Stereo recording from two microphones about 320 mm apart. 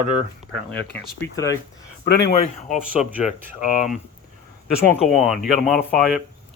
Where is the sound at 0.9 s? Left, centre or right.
Left.